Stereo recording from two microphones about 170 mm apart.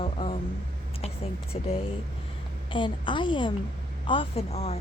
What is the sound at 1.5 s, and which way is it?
A woman's voice, 35° left (ahead or behind).